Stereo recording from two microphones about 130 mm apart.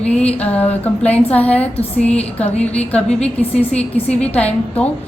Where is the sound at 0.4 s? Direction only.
10° left (ahead or behind).